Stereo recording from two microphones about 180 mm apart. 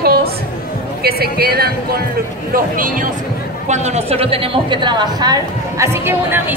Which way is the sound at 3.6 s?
40° right (ahead or behind).